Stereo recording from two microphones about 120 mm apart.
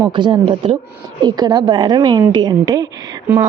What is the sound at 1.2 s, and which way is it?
A woman's voice, 35° right (ahead or behind).